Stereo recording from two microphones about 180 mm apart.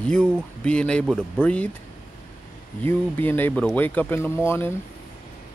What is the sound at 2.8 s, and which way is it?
Speech, 10° left (ahead or behind).